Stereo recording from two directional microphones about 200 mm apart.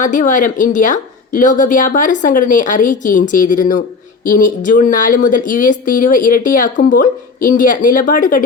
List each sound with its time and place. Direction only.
0.0 s speech: 40° left (ahead or behind)